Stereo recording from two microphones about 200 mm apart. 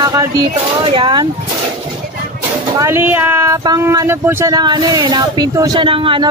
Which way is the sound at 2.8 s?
10° right (ahead or behind).